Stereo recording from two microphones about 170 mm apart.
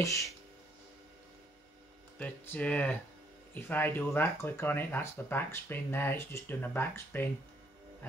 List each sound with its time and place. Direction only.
0.0 s speech: 20° left (ahead or behind)
2.1 s speech: 10° left (ahead or behind)